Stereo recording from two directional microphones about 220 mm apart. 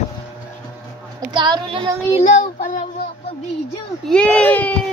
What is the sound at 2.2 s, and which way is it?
Speech, 35° left (ahead or behind).